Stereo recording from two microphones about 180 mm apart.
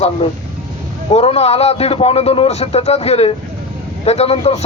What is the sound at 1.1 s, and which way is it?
Speech, 35° left (ahead or behind).